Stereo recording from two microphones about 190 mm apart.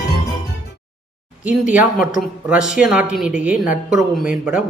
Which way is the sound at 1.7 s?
5° right (ahead or behind).